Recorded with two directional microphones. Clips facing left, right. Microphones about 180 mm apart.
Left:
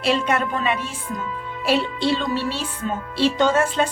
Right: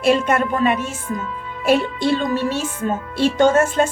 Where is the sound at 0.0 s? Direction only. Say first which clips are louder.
Right 4 dB; 50° right (ahead or behind).